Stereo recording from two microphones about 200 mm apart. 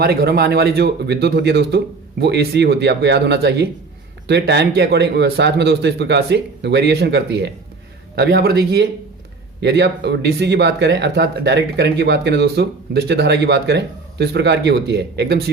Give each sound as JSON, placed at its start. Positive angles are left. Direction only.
{"t": 0.0, "sound": "speech", "side_deg": -50}